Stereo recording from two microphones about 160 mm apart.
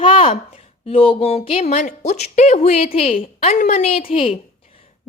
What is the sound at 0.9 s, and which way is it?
A woman's voice, 35° left (ahead or behind).